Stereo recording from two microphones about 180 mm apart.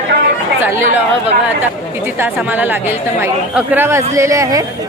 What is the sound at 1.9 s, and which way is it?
Speech, 10° right (ahead or behind).